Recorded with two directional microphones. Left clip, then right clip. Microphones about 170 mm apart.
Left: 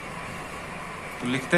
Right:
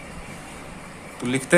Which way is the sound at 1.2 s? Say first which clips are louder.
Right 4 dB; 50° right (ahead or behind).